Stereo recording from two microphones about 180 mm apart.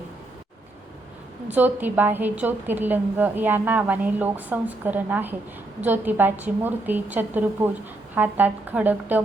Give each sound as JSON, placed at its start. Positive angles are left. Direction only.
{"t": 1.5, "sound": "a woman's voice", "side_deg": -10}